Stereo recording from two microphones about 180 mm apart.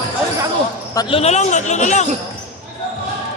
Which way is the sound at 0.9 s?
30° left (ahead or behind).